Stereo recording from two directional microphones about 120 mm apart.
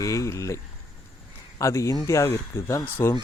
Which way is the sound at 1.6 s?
25° left (ahead or behind).